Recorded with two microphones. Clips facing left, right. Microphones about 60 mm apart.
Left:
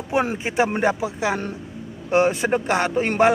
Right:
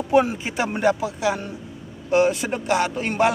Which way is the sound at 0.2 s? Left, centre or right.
Left.